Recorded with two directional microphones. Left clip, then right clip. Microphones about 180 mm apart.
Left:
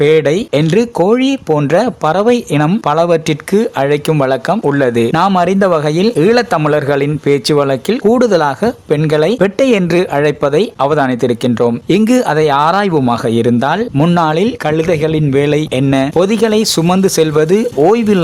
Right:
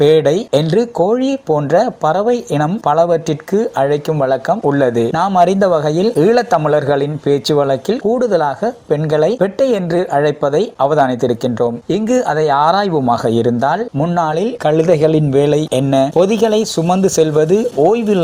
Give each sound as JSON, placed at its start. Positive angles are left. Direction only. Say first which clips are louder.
{"t": 0.0, "sound": "speech", "louder": "left 1 dB", "side_deg": 5}
{"t": 8.0, "sound": "speech", "louder": "left 4 dB", "side_deg": 25}
{"t": 14.6, "sound": "speech", "louder": "right 2 dB", "side_deg": 0}